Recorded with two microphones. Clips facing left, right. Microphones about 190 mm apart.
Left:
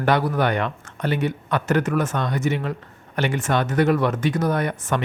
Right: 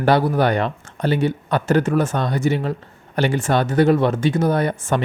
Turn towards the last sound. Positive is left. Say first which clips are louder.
# right 3 dB
turn(degrees=-30)  # may be behind; listen again after turning